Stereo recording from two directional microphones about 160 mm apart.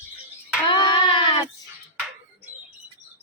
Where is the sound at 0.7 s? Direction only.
30° left (ahead or behind).